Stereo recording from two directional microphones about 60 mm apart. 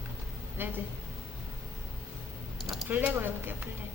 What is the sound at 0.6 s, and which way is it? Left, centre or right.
Speech, right.